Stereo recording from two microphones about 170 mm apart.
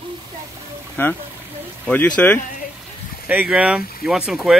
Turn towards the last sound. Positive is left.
turn(degrees=-5)  # may be behind; listen again after turning